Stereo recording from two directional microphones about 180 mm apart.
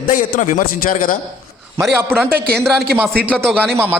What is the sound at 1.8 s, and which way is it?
Speech, centre (ahead or behind).